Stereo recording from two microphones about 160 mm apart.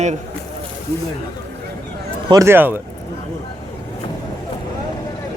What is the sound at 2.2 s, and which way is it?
Speech, 20° right (ahead or behind).